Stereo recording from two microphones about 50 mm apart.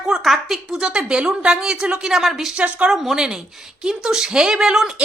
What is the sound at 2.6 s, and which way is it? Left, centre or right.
Speech, right.